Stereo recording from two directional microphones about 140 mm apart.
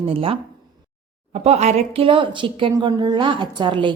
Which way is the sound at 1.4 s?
50° right (ahead or behind).